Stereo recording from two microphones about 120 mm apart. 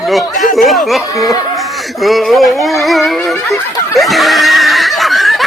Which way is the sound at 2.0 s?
Centre (ahead or behind).